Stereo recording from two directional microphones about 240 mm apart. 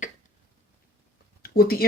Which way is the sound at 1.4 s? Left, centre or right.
Left.